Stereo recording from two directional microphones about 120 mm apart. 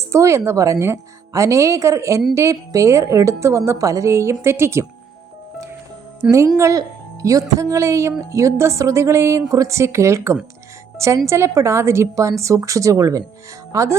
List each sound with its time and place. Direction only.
0.1 s a woman's voice: 25° right (ahead or behind)
6.2 s speech: 10° right (ahead or behind)
6.6 s a woman's voice: 25° right (ahead or behind)